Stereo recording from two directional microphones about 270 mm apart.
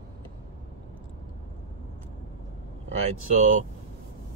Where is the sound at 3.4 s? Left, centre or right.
Right.